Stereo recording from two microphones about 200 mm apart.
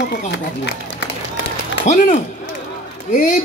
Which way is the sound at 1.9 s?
40° left (ahead or behind).